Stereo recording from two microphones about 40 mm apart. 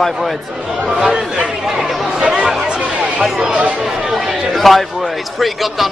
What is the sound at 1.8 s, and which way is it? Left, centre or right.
Chatter, centre.